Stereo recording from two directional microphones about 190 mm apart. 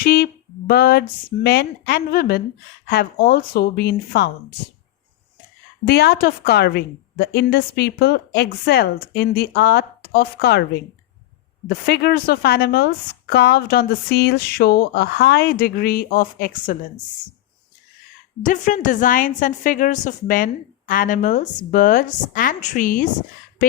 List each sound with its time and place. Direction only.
0.0 s a woman's voice: 50° left (ahead or behind)
5.8 s a woman's voice: 55° left (ahead or behind)
11.7 s a woman's voice: 55° left (ahead or behind)
18.4 s a woman's voice: 40° left (ahead or behind)